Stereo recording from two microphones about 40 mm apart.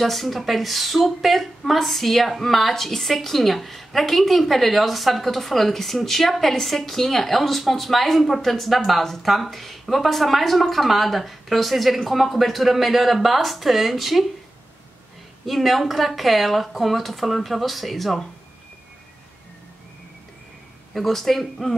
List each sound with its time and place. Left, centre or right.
0.0 s speech: centre
15.4 s speech: centre
20.9 s speech: centre